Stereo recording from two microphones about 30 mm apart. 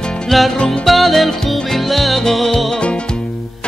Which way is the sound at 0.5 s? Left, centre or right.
Left.